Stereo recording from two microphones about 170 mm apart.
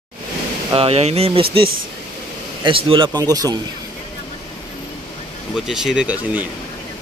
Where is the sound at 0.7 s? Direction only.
35° right (ahead or behind).